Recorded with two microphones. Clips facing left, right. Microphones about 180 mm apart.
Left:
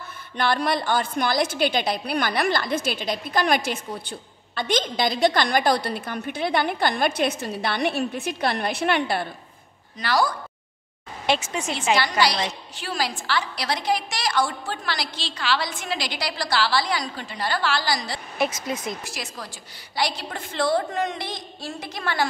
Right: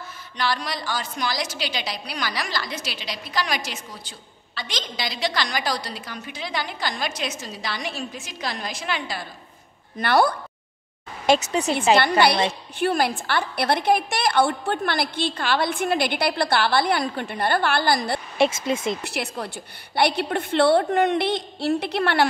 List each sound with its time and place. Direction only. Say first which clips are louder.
0.4 s a woman's voice: left 4 dB; 55° left (ahead or behind)
9.9 s a woman's voice: right 4 dB; 60° right (ahead or behind)
11.2 s speech: right 5 dB; 40° right (ahead or behind)
11.9 s a woman's voice: right 3 dB; 55° right (ahead or behind)
18.4 s speech: right 4 dB; 25° right (ahead or behind)
19.0 s a woman's voice: right 6 dB; 60° right (ahead or behind)